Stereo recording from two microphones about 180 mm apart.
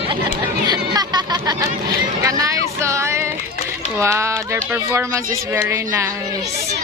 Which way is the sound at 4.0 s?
15° right (ahead or behind).